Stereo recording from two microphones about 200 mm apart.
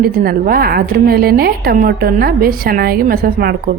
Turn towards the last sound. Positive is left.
turn(degrees=-45)  # may be behind; listen again after turning